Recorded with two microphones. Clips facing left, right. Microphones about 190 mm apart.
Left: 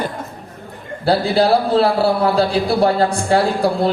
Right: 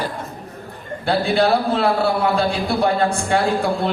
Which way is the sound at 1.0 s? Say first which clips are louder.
Left 3 dB; 35° left (ahead or behind).